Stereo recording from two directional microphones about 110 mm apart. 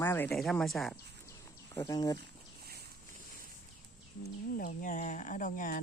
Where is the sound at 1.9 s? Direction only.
35° left (ahead or behind).